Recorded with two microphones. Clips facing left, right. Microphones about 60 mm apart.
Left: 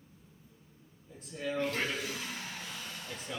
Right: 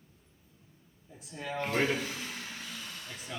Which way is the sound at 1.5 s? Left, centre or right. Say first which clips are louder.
Right 3 dB; right.